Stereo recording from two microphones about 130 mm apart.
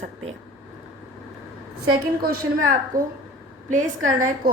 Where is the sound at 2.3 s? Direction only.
90° right.